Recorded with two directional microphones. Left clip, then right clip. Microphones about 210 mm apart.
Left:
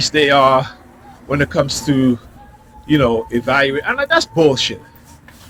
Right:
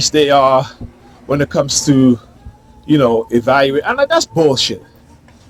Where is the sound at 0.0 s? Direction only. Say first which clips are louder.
Right 1 dB; 60° right (ahead or behind).